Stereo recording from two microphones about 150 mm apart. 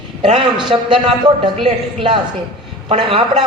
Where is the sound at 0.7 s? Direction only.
35° right (ahead or behind).